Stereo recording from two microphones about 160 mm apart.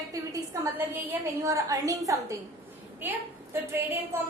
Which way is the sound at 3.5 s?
15° right (ahead or behind).